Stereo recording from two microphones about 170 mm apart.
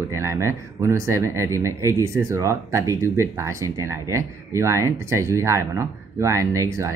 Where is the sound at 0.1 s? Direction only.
15° right (ahead or behind).